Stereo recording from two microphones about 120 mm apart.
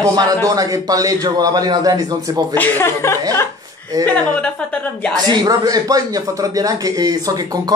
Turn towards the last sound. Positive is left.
turn(degrees=-30)  # may be behind; listen again after turning